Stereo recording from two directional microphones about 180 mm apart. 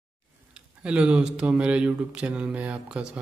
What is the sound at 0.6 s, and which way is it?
Speech, 5° right (ahead or behind).